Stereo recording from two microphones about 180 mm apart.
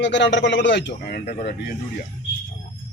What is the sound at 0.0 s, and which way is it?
Speech, 85° left.